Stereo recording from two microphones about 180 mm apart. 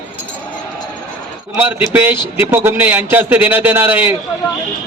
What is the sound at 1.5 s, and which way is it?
A man's voice, 10° right (ahead or behind).